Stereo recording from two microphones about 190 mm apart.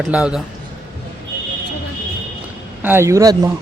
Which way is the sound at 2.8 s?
15° right (ahead or behind).